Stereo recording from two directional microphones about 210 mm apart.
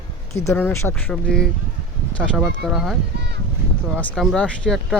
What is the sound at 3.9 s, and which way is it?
Speech, 5° left (ahead or behind).